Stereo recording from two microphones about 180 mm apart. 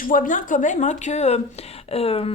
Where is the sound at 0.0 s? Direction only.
45° left (ahead or behind).